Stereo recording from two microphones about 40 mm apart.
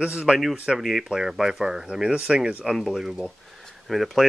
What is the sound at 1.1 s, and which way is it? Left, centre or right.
Speech, centre.